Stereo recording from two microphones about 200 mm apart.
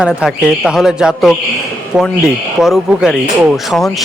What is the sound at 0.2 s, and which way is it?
Speech, centre (ahead or behind).